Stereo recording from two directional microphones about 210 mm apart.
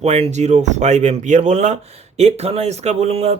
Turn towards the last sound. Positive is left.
turn(degrees=-30)  # may be behind; listen again after turning